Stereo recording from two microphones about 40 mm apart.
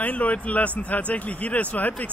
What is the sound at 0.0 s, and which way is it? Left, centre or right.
Speech, left.